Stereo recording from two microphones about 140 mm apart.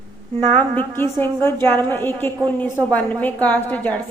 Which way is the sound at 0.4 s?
40° right (ahead or behind).